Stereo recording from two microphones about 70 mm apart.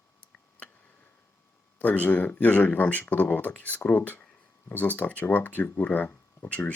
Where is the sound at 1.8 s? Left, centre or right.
Left.